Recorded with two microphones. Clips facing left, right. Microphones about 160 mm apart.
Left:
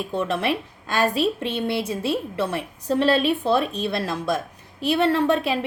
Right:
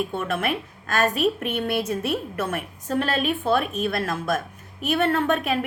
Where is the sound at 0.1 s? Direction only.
35° left (ahead or behind).